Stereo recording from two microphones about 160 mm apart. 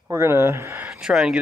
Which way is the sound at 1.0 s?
5° right (ahead or behind).